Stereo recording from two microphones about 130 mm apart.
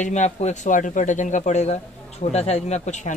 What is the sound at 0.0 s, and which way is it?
A man's voice, 65° left (ahead or behind).